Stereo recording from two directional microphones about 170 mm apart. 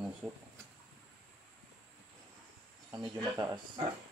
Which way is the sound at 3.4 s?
25° right (ahead or behind).